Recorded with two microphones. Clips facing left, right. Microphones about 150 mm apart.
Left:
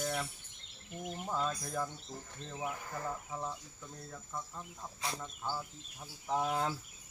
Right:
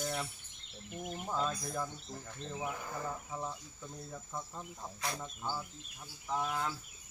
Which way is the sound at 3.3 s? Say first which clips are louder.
Even; centre (ahead or behind).